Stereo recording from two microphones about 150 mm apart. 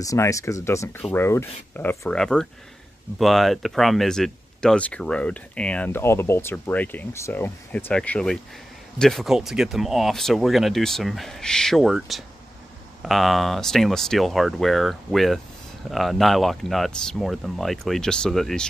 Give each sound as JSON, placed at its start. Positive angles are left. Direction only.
{"t": 0.0, "sound": "speech", "side_deg": 20}